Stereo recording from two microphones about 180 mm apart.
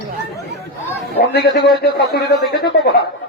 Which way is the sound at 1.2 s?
65° left (ahead or behind).